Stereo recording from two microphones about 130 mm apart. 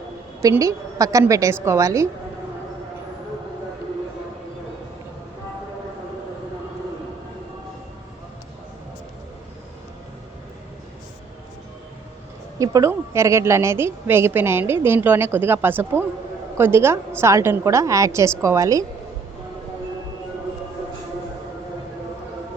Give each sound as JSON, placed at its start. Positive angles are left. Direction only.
{"t": 0.5, "sound": "a woman's voice", "side_deg": -25}
{"t": 12.5, "sound": "a sound", "side_deg": -25}
{"t": 12.9, "sound": "a woman's voice", "side_deg": -20}